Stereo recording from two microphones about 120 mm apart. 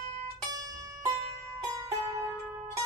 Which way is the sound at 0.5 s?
30° right (ahead or behind).